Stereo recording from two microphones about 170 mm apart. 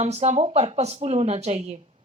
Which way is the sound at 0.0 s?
40° right (ahead or behind).